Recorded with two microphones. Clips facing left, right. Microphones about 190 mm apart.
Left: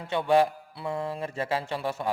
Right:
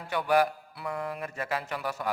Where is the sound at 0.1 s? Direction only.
25° left (ahead or behind).